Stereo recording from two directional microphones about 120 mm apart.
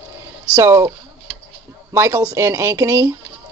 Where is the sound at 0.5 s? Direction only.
25° right (ahead or behind).